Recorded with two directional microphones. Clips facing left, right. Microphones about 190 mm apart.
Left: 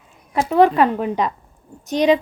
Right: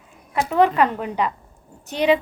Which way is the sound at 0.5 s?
15° left (ahead or behind).